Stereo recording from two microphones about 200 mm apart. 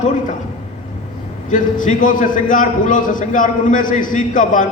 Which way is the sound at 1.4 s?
40° left (ahead or behind).